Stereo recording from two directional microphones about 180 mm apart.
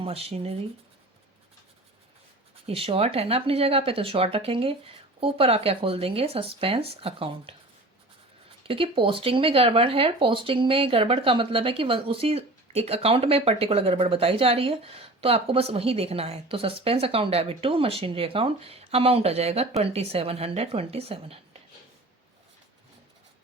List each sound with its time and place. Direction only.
0.0 s speech: 35° right (ahead or behind)
2.6 s speech: 30° right (ahead or behind)